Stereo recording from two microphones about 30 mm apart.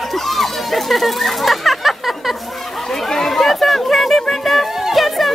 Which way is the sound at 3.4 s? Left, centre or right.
Centre.